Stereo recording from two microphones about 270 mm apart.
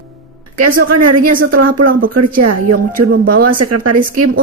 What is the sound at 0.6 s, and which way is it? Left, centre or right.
Speech, right.